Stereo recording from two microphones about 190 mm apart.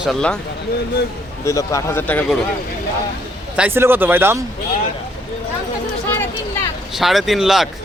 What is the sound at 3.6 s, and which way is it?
Speech, 10° right (ahead or behind).